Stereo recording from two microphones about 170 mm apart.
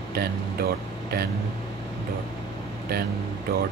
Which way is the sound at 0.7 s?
65° right (ahead or behind).